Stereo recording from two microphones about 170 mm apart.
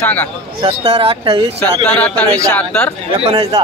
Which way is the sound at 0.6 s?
35° right (ahead or behind).